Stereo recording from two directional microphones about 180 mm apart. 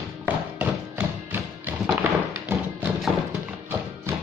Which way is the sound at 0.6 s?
10° right (ahead or behind).